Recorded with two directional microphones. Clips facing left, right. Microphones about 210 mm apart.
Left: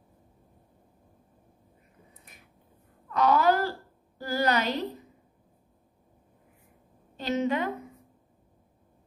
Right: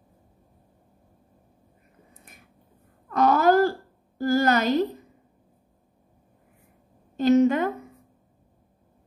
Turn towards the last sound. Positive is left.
turn(degrees=-45)  # may be behind; listen again after turning